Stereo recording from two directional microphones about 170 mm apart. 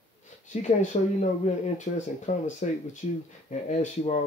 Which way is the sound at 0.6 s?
45° left (ahead or behind).